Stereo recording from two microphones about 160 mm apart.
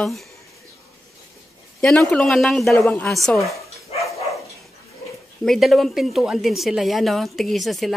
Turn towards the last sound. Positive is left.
turn(degrees=0)  # may be behind; listen again after turning